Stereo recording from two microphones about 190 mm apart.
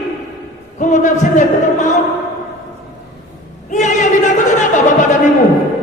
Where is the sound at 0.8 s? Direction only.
40° left (ahead or behind).